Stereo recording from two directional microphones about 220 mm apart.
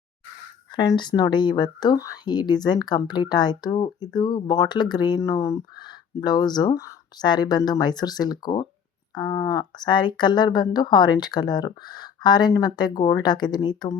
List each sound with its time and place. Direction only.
0.7 s speech: 20° left (ahead or behind)